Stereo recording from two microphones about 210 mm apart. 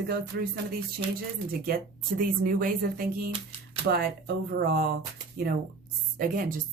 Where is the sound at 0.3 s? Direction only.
55° right (ahead or behind).